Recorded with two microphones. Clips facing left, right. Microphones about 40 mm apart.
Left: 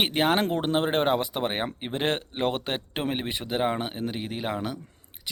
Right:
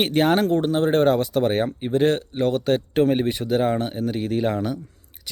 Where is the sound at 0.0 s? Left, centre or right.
Centre.